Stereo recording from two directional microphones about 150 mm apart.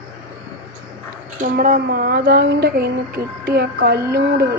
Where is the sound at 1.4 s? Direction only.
65° right (ahead or behind).